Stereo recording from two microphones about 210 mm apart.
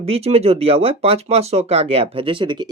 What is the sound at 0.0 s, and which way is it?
Speech, 30° right (ahead or behind).